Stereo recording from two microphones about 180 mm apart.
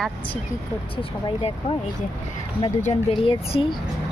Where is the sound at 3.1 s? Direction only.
30° left (ahead or behind).